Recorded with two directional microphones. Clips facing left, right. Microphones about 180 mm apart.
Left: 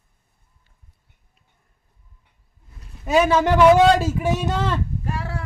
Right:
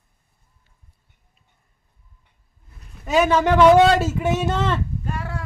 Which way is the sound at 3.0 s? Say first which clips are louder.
Even; 5° left (ahead or behind).